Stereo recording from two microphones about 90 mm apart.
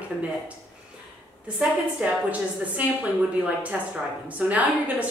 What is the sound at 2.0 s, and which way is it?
A woman's voice, 15° right (ahead or behind).